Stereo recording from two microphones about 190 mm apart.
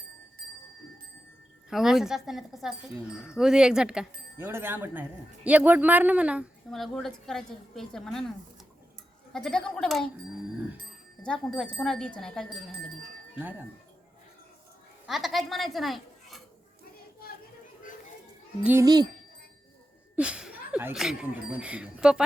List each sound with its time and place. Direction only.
1.7 s speech: centre (ahead or behind)
9.3 s speech: 5° left (ahead or behind)
11.2 s speech: 5° left (ahead or behind)
13.4 s speech: 10° right (ahead or behind)
15.0 s speech: centre (ahead or behind)
18.6 s speech: 10° right (ahead or behind)
18.9 s speech: 20° right (ahead or behind)
20.1 s speech: 5° right (ahead or behind)